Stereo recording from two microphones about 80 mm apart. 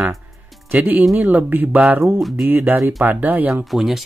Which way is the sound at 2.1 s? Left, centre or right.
Centre.